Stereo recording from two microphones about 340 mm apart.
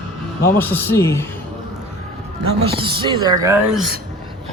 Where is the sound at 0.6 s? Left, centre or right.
Centre.